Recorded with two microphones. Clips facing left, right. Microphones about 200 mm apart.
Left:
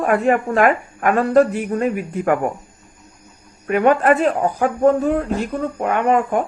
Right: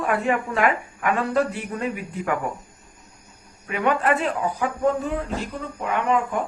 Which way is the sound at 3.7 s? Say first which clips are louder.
Left 7 dB; 50° left (ahead or behind).